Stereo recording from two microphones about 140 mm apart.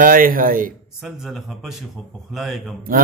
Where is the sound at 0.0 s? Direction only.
80° right.